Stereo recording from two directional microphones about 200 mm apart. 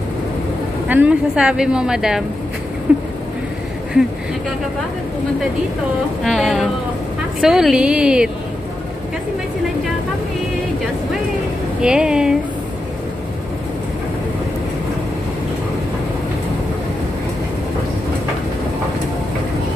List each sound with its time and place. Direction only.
0.8 s speech: 5° right (ahead or behind)
2.9 s a sound: 5° right (ahead or behind)
6.2 s speech: centre (ahead or behind)
11.8 s speech: 5° right (ahead or behind)